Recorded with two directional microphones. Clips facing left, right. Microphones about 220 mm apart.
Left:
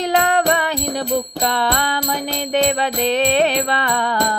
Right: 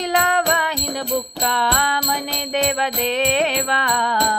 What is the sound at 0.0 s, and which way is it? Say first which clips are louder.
Music: left 3 dB; 35° left (ahead or behind).